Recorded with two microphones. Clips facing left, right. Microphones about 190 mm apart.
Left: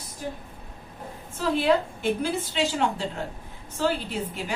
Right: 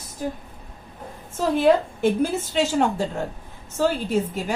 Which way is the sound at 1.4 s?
45° right (ahead or behind).